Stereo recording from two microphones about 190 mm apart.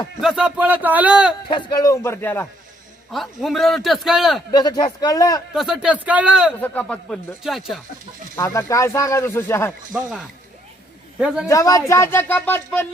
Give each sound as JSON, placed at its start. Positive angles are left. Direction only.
{"t": 0.2, "sound": "a man's voice", "side_deg": -5}
{"t": 1.5, "sound": "speech", "side_deg": 25}
{"t": 3.1, "sound": "a man's voice", "side_deg": 0}
{"t": 4.5, "sound": "a man's voice", "side_deg": 20}
{"t": 5.5, "sound": "a man's voice", "side_deg": 0}
{"t": 6.6, "sound": "a man's voice", "side_deg": 10}
{"t": 8.4, "sound": "speech", "side_deg": 15}
{"t": 11.2, "sound": "a man's voice", "side_deg": -5}
{"t": 11.4, "sound": "speech", "side_deg": 15}